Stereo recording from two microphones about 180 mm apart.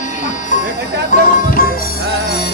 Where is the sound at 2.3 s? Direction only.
65° left (ahead or behind).